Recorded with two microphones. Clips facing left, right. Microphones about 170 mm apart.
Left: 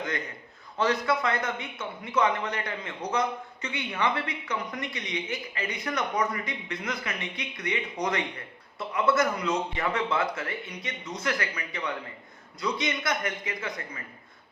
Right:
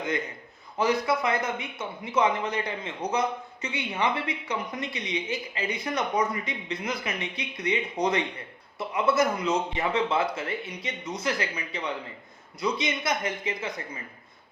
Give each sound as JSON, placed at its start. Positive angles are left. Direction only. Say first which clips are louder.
{"t": 0.8, "sound": "a man's voice", "louder": "right 1 dB", "side_deg": -20}